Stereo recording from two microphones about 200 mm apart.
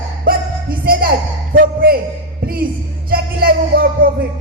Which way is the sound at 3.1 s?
50° right (ahead or behind).